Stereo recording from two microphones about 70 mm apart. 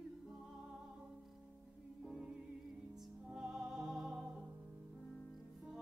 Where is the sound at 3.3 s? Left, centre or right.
Centre.